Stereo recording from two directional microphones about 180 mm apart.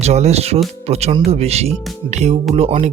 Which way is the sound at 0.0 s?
35° right (ahead or behind).